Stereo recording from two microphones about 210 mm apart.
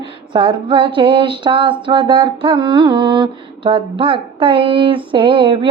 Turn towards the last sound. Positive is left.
turn(degrees=-25)  # may be behind; listen again after turning